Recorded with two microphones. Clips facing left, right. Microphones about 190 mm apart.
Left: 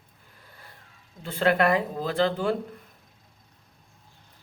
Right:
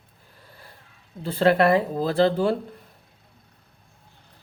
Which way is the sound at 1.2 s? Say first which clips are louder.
Right 4 dB; 35° right (ahead or behind).